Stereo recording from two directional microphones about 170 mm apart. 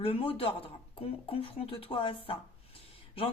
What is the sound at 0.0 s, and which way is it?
Speech, 35° left (ahead or behind).